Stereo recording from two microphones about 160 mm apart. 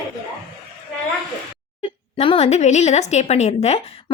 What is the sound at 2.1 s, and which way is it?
A woman's voice, 40° left (ahead or behind).